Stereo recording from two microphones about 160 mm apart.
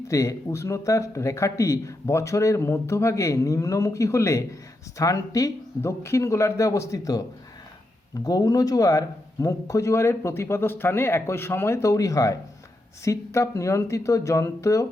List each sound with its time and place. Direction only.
0.1 s speech: 20° left (ahead or behind)